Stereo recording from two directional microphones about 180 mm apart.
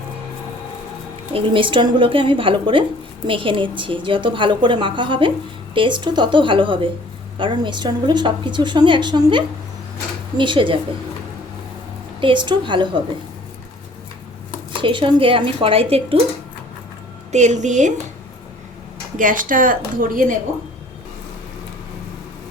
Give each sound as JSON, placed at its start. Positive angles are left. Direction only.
{"t": 1.3, "sound": "a woman's voice", "side_deg": -30}
{"t": 12.2, "sound": "a woman's voice", "side_deg": -25}
{"t": 14.8, "sound": "a woman's voice", "side_deg": -30}
{"t": 17.3, "sound": "a woman's voice", "side_deg": -40}
{"t": 19.1, "sound": "a woman's voice", "side_deg": -50}